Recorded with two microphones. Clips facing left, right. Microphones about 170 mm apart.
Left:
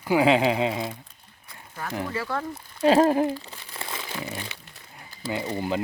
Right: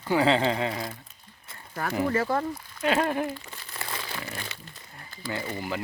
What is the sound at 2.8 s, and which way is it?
Speech, 35° left (ahead or behind).